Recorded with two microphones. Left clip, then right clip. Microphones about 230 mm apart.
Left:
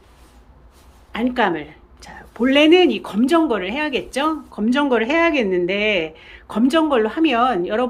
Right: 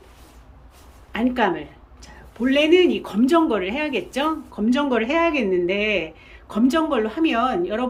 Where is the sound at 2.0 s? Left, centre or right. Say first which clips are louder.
Left 5 dB; centre.